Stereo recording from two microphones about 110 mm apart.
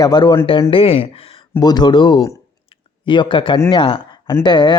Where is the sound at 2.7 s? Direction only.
50° left (ahead or behind).